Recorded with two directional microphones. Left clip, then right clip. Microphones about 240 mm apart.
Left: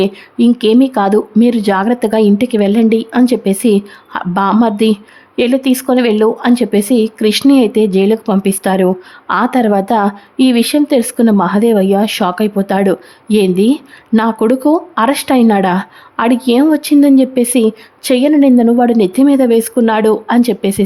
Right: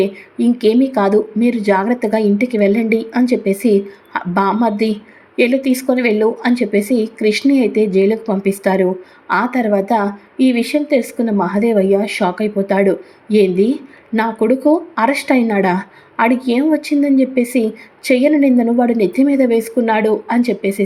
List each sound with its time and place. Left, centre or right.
0.0 s a woman's voice: centre